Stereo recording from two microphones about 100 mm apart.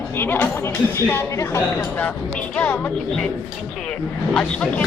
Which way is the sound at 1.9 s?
15° left (ahead or behind).